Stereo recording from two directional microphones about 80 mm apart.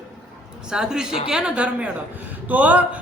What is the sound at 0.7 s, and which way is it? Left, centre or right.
A man's voice, centre.